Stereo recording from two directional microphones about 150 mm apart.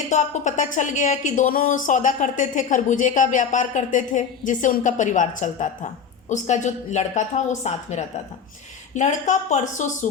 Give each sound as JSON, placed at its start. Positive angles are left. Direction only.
{"t": 0.1, "sound": "speech", "side_deg": 55}